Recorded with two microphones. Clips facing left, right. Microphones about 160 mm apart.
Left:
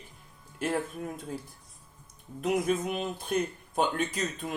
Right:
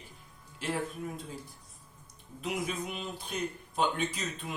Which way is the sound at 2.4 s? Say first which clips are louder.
Left 7 dB; 45° left (ahead or behind).